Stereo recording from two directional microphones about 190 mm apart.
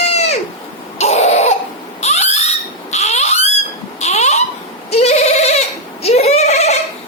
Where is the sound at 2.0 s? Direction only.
35° left (ahead or behind).